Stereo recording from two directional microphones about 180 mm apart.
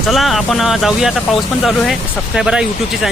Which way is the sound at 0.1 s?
Centre (ahead or behind).